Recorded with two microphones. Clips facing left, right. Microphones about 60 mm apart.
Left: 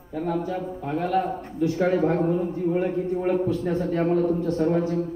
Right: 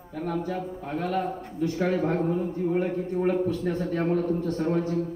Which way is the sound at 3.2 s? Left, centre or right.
Left.